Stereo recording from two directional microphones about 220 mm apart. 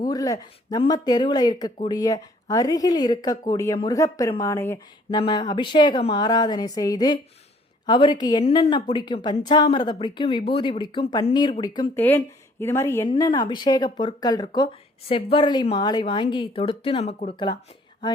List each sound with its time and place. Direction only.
0.0 s a woman's voice: 15° left (ahead or behind)
11.9 s a woman's voice: 10° left (ahead or behind); by 17.2 s 30° left (ahead or behind)